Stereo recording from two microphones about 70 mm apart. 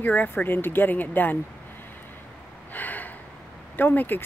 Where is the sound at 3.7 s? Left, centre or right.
Left.